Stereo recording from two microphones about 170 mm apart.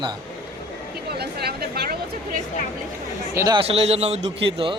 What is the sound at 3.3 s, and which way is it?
Speech, 20° right (ahead or behind).